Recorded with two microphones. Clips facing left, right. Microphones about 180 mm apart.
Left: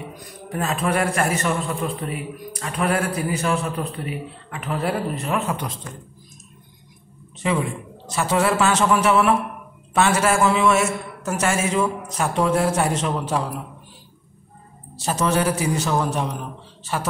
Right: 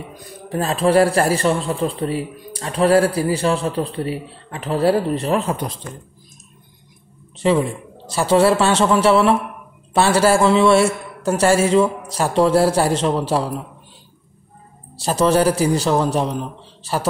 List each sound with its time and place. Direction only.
0.5 s a man's voice: 30° right (ahead or behind)
7.3 s a man's voice: 30° right (ahead or behind)
15.0 s a man's voice: 35° right (ahead or behind)